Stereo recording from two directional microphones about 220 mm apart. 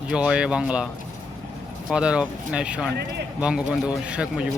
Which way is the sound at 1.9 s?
5° right (ahead or behind).